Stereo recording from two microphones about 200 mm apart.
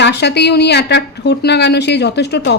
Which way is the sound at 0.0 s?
55° left (ahead or behind).